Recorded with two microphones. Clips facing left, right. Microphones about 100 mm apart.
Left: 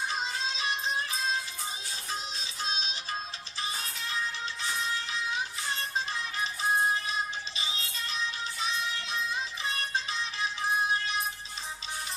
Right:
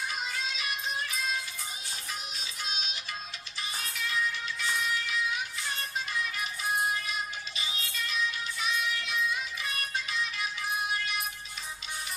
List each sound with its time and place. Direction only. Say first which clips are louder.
0.1 s music: left 2 dB; 30° left (ahead or behind)
2.6 s music: left 4 dB; 30° left (ahead or behind)